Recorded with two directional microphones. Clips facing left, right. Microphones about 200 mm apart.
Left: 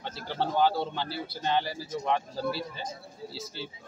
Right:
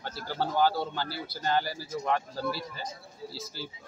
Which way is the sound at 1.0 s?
25° left (ahead or behind).